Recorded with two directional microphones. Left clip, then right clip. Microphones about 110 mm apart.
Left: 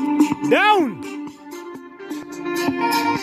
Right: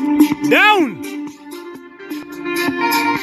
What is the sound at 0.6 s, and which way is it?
Speech, 5° left (ahead or behind).